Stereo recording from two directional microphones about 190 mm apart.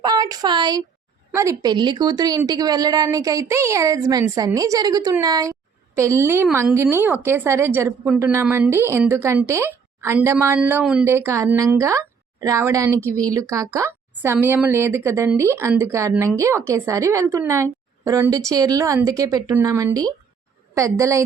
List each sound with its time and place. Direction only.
0.0 s speech: 20° right (ahead or behind)